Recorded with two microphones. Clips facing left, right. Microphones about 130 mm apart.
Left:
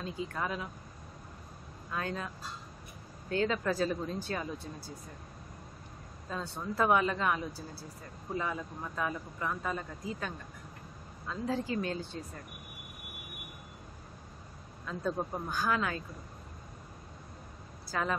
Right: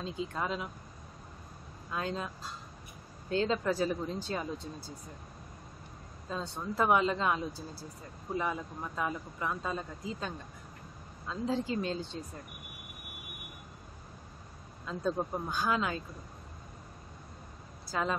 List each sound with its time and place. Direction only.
0.0 s speech: 20° right (ahead or behind)
1.9 s speech: 20° right (ahead or behind)
6.3 s speech: 20° right (ahead or behind)
14.9 s speech: 20° right (ahead or behind)